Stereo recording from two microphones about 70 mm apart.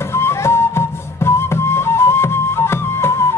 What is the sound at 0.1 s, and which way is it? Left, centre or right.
Flute, left.